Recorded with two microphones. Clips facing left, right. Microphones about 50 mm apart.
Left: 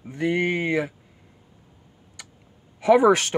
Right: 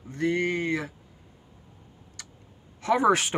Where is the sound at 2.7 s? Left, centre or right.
Centre.